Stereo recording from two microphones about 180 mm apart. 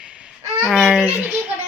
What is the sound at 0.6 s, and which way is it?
Speech, centre (ahead or behind).